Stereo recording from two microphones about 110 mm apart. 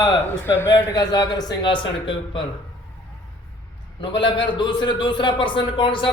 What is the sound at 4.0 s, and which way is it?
A man's voice, 50° left (ahead or behind).